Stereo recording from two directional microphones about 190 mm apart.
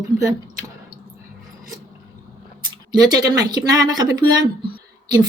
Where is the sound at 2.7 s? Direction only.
20° right (ahead or behind).